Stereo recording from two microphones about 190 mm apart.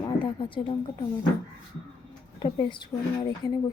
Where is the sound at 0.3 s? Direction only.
25° left (ahead or behind).